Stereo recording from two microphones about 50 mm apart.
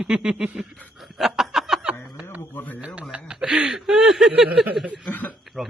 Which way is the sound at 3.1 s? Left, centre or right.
Centre.